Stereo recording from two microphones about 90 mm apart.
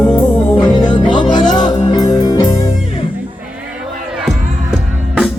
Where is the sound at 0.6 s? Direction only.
50° left (ahead or behind).